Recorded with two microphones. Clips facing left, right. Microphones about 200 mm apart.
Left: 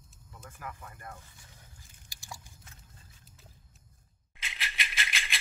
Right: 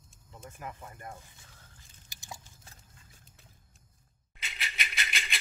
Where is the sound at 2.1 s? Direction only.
20° right (ahead or behind).